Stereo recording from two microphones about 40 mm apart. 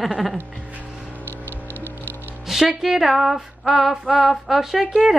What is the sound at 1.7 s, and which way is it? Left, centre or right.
Music, left.